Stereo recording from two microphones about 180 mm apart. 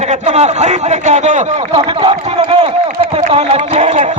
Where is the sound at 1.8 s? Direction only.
30° right (ahead or behind).